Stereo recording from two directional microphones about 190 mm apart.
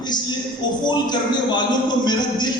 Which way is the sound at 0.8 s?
20° left (ahead or behind).